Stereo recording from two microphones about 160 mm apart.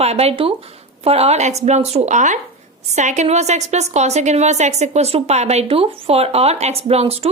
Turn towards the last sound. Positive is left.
turn(degrees=-40)  # may be behind; listen again after turning